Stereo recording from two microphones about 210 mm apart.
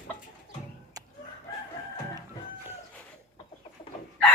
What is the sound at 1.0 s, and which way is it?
Chicken, 15° right (ahead or behind).